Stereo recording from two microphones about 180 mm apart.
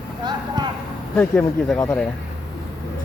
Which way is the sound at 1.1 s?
10° left (ahead or behind).